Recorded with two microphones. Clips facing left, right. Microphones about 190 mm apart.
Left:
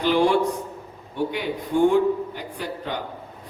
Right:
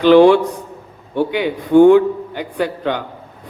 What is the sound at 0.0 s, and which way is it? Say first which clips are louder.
A man's voice: right 10 dB; 85° right.